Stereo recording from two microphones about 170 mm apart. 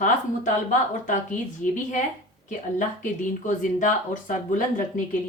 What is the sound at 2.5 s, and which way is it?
A woman's voice, 50° left (ahead or behind).